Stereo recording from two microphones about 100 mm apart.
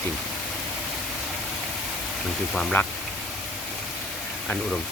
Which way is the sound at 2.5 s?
10° left (ahead or behind).